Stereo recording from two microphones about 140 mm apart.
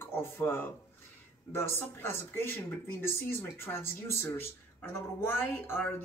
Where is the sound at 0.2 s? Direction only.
15° left (ahead or behind).